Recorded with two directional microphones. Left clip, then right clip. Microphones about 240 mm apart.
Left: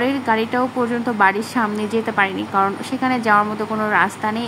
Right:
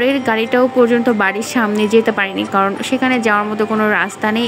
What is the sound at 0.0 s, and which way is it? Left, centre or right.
A woman's voice, centre.